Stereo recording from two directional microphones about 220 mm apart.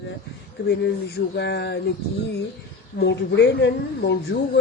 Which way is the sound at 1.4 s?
50° left (ahead or behind).